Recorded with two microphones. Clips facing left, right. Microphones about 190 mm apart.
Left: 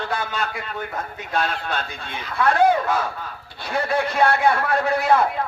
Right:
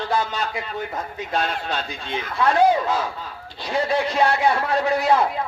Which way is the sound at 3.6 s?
55° left (ahead or behind).